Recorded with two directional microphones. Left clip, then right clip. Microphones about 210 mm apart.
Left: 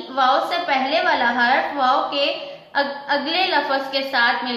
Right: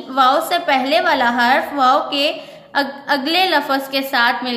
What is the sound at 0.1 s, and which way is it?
A woman's voice, 50° right (ahead or behind).